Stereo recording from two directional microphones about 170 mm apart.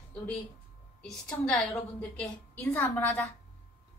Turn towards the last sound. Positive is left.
turn(degrees=10)  # may be behind; listen again after turning